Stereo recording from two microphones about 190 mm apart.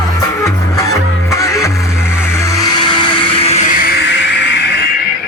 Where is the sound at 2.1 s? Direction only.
15° left (ahead or behind); by 4.9 s 60° left (ahead or behind).